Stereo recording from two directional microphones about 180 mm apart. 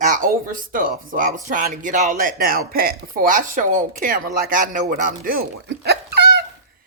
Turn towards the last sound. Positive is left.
turn(degrees=-65)  # may be behind; listen again after turning